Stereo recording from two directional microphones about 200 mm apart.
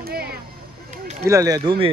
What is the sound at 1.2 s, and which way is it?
Speech, 15° right (ahead or behind).